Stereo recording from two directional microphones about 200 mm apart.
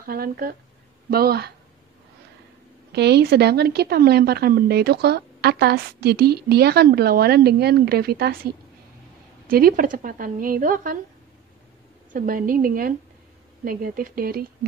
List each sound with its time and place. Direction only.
0.0 s a woman's voice: 45° right (ahead or behind)
2.9 s a woman's voice: 55° right (ahead or behind)
9.5 s a woman's voice: 45° right (ahead or behind)
12.1 s a woman's voice: 45° right (ahead or behind)